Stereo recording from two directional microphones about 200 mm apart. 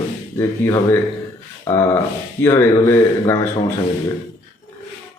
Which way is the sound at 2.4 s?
10° left (ahead or behind).